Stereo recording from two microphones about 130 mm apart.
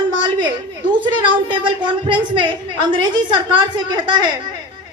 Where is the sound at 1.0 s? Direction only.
40° right (ahead or behind).